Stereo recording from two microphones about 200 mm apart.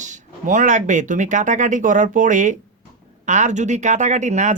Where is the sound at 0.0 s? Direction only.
40° right (ahead or behind).